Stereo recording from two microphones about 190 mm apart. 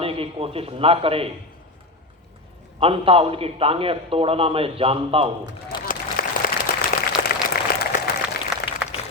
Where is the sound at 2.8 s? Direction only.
30° right (ahead or behind).